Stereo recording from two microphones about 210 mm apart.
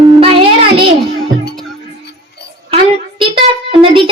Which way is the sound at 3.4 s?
25° right (ahead or behind).